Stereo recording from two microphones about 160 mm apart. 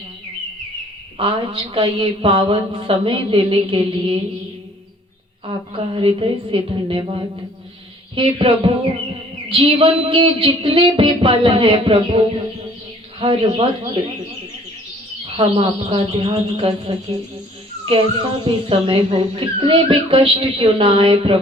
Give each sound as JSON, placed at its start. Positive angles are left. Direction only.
{"t": 1.2, "sound": "a woman's voice", "side_deg": -35}
{"t": 5.5, "sound": "a woman's voice", "side_deg": -35}
{"t": 15.4, "sound": "a woman's voice", "side_deg": -35}
{"t": 18.4, "sound": "a woman's voice", "side_deg": -30}